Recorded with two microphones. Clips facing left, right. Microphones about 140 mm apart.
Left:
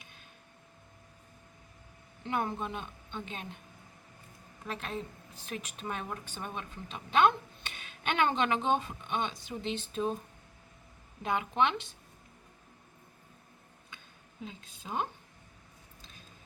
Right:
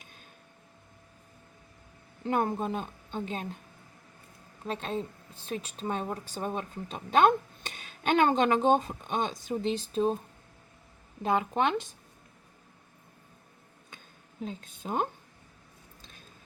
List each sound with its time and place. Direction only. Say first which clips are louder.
2.2 s a woman's voice: right 5 dB; 40° right (ahead or behind)
4.6 s a woman's voice: right 5 dB; 30° right (ahead or behind)
11.2 s a woman's voice: right 3 dB; 35° right (ahead or behind)
14.4 s a woman's voice: right 7 dB; 50° right (ahead or behind)